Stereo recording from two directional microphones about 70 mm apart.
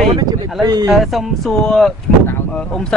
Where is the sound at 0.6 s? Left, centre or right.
Right.